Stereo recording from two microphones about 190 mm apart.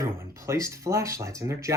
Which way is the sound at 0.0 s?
15° right (ahead or behind).